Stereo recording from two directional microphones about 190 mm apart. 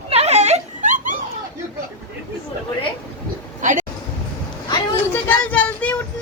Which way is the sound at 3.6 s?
40° right (ahead or behind).